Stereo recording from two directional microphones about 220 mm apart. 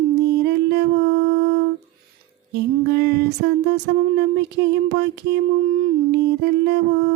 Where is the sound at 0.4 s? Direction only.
50° right (ahead or behind).